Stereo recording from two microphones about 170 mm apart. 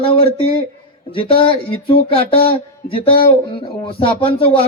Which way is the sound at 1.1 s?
30° left (ahead or behind).